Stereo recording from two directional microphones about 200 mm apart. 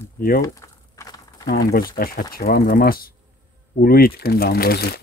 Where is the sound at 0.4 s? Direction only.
15° left (ahead or behind).